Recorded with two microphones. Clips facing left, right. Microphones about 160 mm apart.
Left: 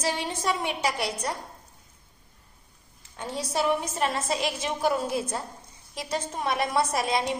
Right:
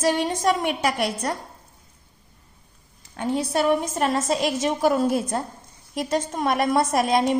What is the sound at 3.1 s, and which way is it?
A woman's voice, 60° right (ahead or behind).